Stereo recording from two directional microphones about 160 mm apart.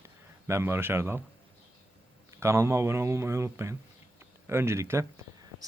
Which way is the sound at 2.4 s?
15° right (ahead or behind).